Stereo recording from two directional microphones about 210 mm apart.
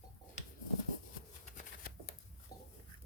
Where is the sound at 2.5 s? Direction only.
15° left (ahead or behind).